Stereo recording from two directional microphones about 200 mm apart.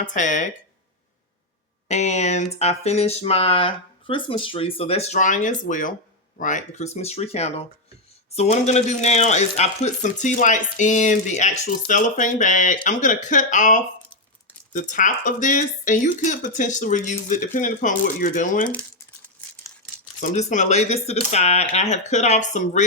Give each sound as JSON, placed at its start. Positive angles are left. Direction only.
{"t": 0.0, "sound": "speech", "side_deg": 40}
{"t": 1.9, "sound": "speech", "side_deg": 35}
{"t": 20.3, "sound": "speech", "side_deg": 35}